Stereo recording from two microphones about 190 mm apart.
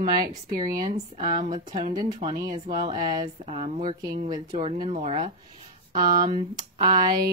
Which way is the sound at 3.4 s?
35° right (ahead or behind).